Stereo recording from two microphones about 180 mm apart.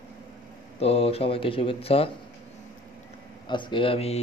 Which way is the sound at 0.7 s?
35° left (ahead or behind).